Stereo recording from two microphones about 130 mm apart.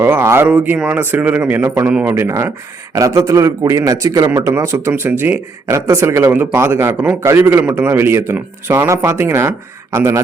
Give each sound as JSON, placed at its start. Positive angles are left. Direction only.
{"t": 0.0, "sound": "speech", "side_deg": -20}